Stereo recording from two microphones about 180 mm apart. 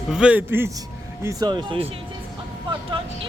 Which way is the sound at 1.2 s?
25° right (ahead or behind).